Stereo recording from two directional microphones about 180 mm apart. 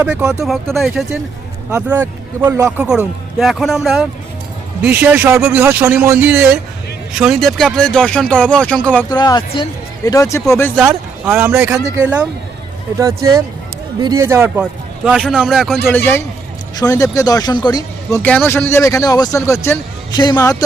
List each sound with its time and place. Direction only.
0.0 s a man's voice: 5° right (ahead or behind)
4.8 s a man's voice: 10° right (ahead or behind); by 9.0 s 5° left (ahead or behind)
9.0 s speech: 20° left (ahead or behind)
10.8 s a man's voice: 15° right (ahead or behind)
13.0 s a man's voice: 20° right (ahead or behind); by 15.8 s centre (ahead or behind)
15.8 s speech: 10° left (ahead or behind)
18.2 s speech: 10° left (ahead or behind)